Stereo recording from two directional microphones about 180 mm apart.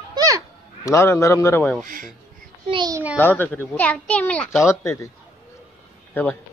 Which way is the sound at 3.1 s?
10° left (ahead or behind).